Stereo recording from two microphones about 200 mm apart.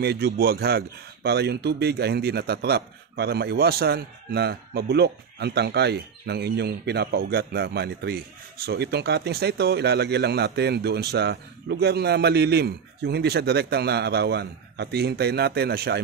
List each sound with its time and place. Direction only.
0.0 s speech: 55° right (ahead or behind)